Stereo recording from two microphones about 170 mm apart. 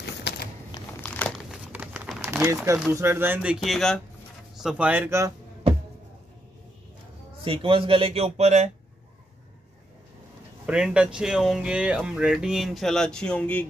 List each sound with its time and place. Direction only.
0.0 s a sound: 75° left (ahead or behind)
1.0 s crumpling: 10° left (ahead or behind)
1.5 s crumpling: 10° right (ahead or behind)
2.4 s speech: 20° right (ahead or behind)
7.4 s speech: 30° right (ahead or behind)
10.7 s speech: 5° right (ahead or behind)